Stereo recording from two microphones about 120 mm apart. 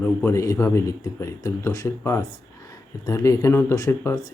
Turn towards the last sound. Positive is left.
turn(degrees=25)  # may be behind; listen again after turning